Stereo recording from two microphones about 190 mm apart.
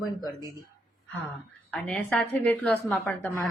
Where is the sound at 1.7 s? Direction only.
5° left (ahead or behind).